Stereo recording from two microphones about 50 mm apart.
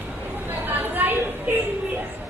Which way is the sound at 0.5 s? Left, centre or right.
Right.